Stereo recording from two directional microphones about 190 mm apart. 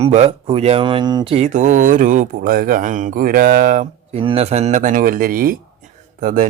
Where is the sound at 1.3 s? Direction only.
40° right (ahead or behind).